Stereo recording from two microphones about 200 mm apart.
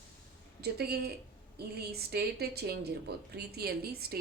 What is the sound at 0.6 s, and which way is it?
A woman's voice, 50° right (ahead or behind).